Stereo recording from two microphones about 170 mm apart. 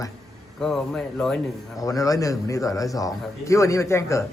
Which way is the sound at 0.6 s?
Centre (ahead or behind).